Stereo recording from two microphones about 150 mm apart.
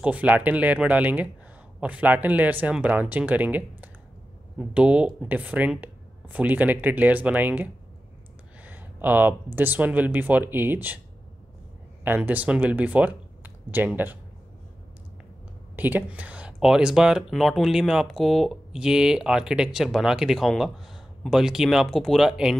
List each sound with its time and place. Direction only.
0.0 s speech: 10° right (ahead or behind)
12.0 s speech: 10° right (ahead or behind)
13.4 s a sound: 10° right (ahead or behind)
15.7 s speech: 10° right (ahead or behind)